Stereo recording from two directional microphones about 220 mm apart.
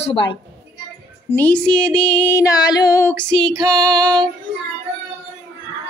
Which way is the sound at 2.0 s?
5° left (ahead or behind).